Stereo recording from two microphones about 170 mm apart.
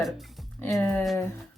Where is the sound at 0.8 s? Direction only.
5° left (ahead or behind).